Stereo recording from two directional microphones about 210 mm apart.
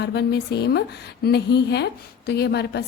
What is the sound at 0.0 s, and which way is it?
A woman's voice, 55° left (ahead or behind).